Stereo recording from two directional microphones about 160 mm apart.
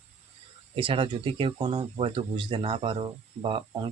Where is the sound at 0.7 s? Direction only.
35° right (ahead or behind).